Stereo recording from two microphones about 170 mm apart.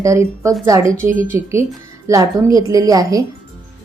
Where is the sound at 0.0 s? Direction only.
20° right (ahead or behind).